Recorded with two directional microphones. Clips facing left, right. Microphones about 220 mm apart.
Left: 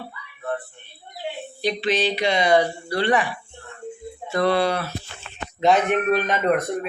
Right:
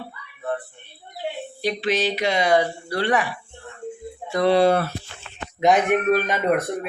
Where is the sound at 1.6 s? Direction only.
10° right (ahead or behind).